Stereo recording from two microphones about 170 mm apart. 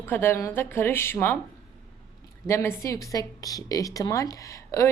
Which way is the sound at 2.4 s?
15° left (ahead or behind).